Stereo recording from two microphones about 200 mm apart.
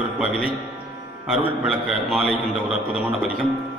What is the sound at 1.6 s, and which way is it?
A man's voice, centre (ahead or behind).